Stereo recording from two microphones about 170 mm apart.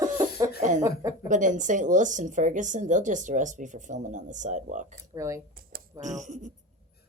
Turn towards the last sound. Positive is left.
turn(degrees=-45)  # may be behind; listen again after turning